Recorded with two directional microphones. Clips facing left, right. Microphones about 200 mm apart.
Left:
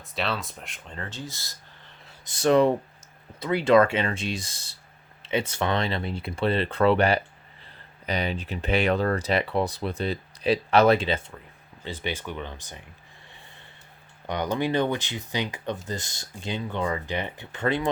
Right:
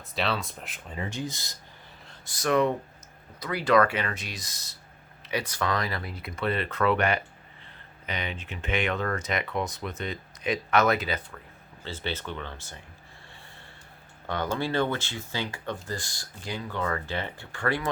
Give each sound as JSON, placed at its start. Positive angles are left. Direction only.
{"t": 0.0, "sound": "speech", "side_deg": 0}
{"t": 2.2, "sound": "speech", "side_deg": 25}
{"t": 11.8, "sound": "speech", "side_deg": 15}
{"t": 14.3, "sound": "speech", "side_deg": 15}